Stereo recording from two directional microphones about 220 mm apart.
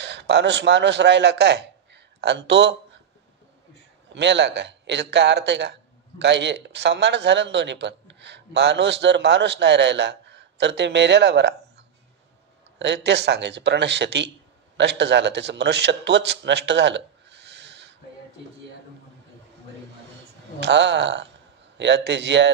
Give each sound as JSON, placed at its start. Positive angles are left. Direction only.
{"t": 0.0, "sound": "a man's voice", "side_deg": -50}
{"t": 4.1, "sound": "a man's voice", "side_deg": -55}
{"t": 20.6, "sound": "a man's voice", "side_deg": -50}